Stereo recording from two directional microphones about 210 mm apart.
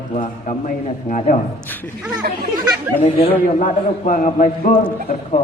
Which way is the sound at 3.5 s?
40° left (ahead or behind).